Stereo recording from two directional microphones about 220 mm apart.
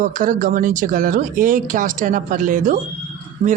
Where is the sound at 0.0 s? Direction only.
35° right (ahead or behind).